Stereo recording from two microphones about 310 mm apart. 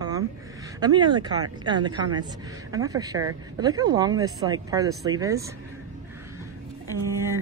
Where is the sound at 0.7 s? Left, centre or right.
Centre.